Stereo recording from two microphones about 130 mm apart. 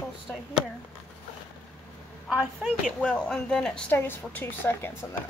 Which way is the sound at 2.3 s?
5° right (ahead or behind).